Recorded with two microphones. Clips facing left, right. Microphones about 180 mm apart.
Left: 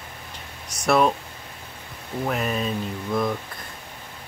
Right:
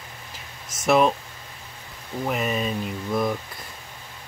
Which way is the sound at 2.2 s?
5° right (ahead or behind).